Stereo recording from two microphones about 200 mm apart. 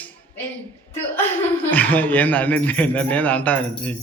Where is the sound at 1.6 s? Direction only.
10° left (ahead or behind).